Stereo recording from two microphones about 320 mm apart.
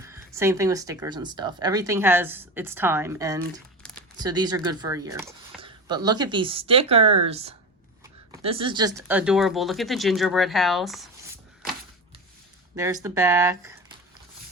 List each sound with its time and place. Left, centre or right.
0.0 s speech: centre
12.7 s speech: centre